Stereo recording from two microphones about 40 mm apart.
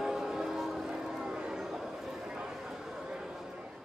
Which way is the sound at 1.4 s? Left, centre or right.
Centre.